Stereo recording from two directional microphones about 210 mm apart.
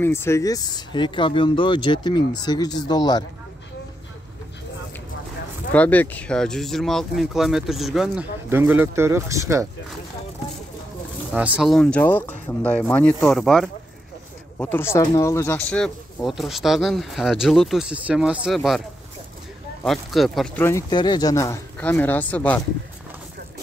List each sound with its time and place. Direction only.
0.0 s speech: 10° left (ahead or behind)
5.7 s speech: 5° left (ahead or behind); by 9.7 s 15° right (ahead or behind)
11.3 s speech: 5° right (ahead or behind)
14.6 s speech: 10° left (ahead or behind)
19.8 s speech: centre (ahead or behind)